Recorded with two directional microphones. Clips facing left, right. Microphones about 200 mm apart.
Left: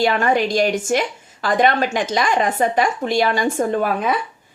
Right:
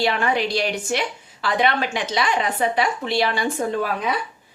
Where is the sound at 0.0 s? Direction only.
45° left (ahead or behind).